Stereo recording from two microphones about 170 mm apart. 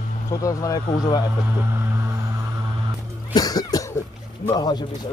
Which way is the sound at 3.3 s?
20° left (ahead or behind).